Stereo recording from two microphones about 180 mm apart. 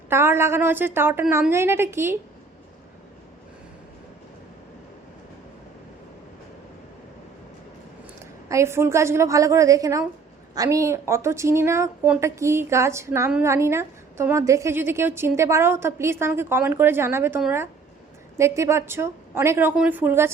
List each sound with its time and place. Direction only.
0.1 s a woman's voice: 15° right (ahead or behind)
8.4 s a woman's voice: 15° right (ahead or behind)